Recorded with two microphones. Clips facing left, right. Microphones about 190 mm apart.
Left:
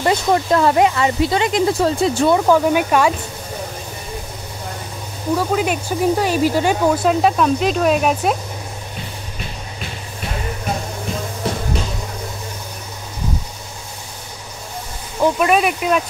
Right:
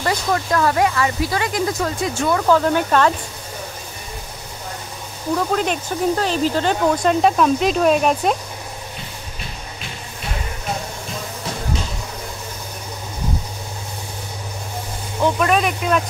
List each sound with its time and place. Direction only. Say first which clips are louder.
0.0 s speech: left 4 dB; 25° left (ahead or behind)
2.3 s speech: right 2 dB; 15° left (ahead or behind)
5.3 s speech: left 2 dB; 5° left (ahead or behind)
15.3 s speech: left 2 dB; 10° left (ahead or behind)